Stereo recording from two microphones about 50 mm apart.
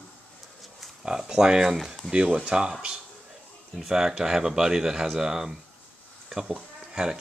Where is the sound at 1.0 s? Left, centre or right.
Centre.